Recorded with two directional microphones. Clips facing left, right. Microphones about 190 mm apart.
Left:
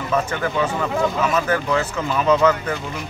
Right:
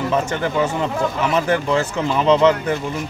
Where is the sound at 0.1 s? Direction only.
25° right (ahead or behind).